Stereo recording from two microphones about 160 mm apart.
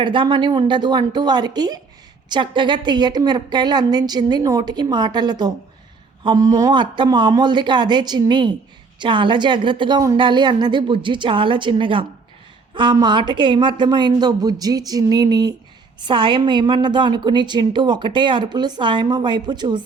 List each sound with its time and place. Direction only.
0.0 s a woman's voice: 30° right (ahead or behind)